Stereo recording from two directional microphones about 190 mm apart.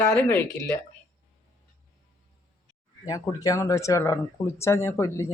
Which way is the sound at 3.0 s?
20° left (ahead or behind).